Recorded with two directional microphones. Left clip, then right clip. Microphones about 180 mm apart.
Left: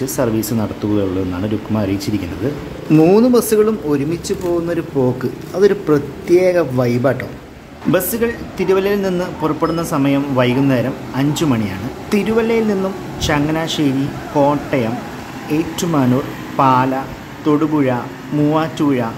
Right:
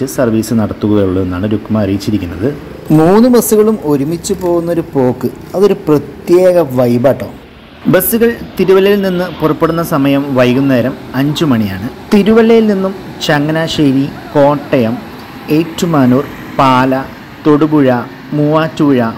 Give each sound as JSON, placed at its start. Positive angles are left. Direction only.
{"t": 0.0, "sound": "a man's voice", "side_deg": -10}
{"t": 3.3, "sound": "a man's voice", "side_deg": -15}